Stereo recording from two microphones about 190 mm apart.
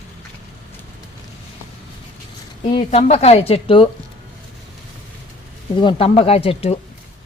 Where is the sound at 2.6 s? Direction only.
25° left (ahead or behind).